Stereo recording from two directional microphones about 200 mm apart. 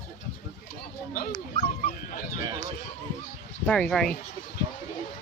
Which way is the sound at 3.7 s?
5° left (ahead or behind).